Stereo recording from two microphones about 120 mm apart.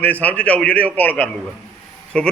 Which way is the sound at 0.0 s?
15° left (ahead or behind).